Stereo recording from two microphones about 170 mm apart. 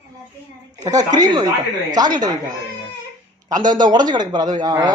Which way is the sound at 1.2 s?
20° right (ahead or behind).